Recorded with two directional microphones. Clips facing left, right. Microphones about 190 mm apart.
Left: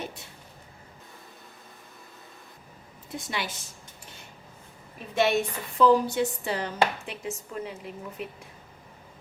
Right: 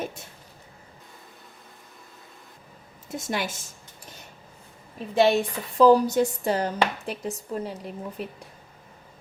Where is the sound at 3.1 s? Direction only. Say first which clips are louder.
Right 4 dB; 45° right (ahead or behind).